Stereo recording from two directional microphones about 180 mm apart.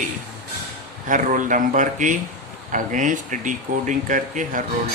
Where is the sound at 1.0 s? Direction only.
45° right (ahead or behind).